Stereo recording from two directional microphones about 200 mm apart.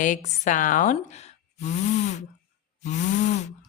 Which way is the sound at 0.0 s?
40° left (ahead or behind).